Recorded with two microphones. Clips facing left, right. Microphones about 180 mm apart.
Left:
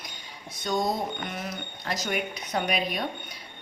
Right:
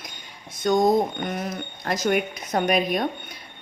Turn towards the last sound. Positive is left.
turn(degrees=-45)  # may be behind; listen again after turning